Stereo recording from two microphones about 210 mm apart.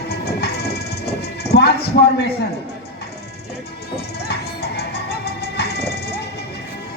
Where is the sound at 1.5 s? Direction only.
50° left (ahead or behind).